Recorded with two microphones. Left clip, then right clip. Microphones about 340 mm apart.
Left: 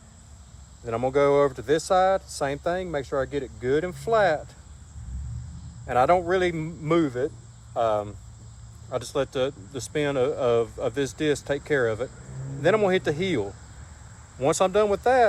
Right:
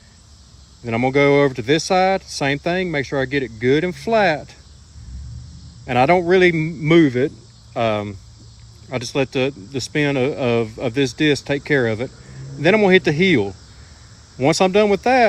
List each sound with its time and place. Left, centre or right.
0.9 s speech: right
5.9 s speech: right
14.4 s speech: centre